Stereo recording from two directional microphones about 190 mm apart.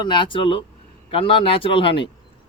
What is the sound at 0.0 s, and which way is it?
Speech, 25° left (ahead or behind).